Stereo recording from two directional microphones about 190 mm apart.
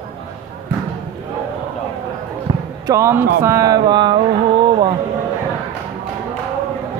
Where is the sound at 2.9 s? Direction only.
15° right (ahead or behind).